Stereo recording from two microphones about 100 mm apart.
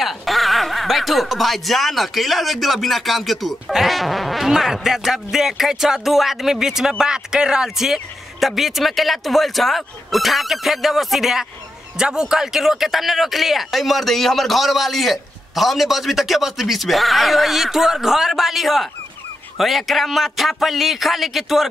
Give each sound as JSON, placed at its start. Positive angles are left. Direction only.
{"t": 0.0, "sound": "speech", "side_deg": 0}